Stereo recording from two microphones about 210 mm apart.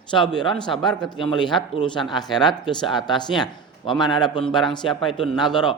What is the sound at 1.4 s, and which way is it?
A man's voice, 20° left (ahead or behind).